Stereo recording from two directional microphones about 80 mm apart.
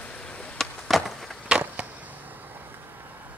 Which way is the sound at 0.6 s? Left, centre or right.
Centre.